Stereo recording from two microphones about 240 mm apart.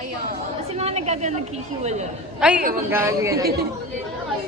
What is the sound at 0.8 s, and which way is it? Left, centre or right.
Speech, right.